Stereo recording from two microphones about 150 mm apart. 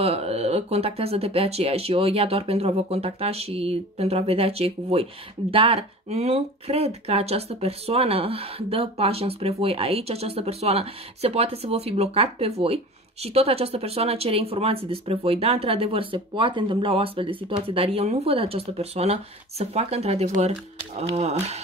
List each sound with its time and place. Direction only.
0.0 s speech: 45° right (ahead or behind)